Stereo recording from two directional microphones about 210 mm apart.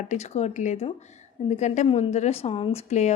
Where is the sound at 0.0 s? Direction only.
35° left (ahead or behind).